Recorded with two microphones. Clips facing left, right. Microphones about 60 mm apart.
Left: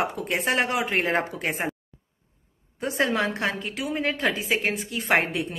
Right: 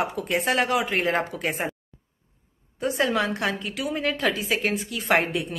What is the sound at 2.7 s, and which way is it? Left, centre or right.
A woman's voice, left.